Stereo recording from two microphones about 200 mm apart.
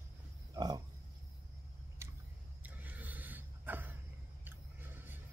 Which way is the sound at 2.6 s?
10° right (ahead or behind).